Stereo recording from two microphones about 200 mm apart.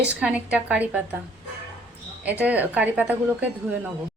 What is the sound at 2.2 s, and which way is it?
A woman's voice, 10° right (ahead or behind).